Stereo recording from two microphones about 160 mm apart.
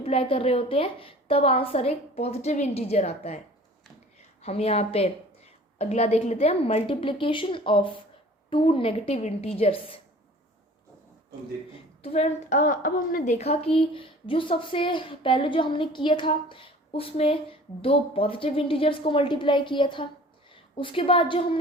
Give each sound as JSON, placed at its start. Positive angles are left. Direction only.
{"t": 0.0, "sound": "a woman's voice", "side_deg": 35}
{"t": 4.4, "sound": "a woman's voice", "side_deg": 40}
{"t": 12.0, "sound": "a woman's voice", "side_deg": 45}
{"t": 13.4, "sound": "a woman's voice", "side_deg": 40}